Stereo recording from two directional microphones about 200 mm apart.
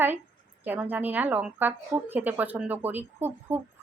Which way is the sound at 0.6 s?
10° right (ahead or behind).